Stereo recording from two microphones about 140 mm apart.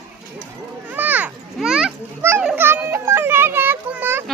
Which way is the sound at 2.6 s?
15° right (ahead or behind).